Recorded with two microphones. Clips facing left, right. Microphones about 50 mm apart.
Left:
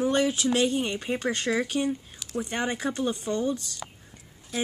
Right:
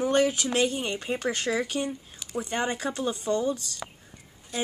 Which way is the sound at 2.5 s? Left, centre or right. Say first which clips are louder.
Right 1 dB; centre.